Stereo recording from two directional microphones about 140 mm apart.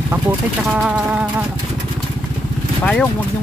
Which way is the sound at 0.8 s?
10° right (ahead or behind).